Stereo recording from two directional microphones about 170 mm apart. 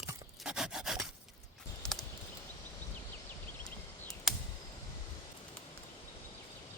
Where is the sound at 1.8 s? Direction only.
5° left (ahead or behind).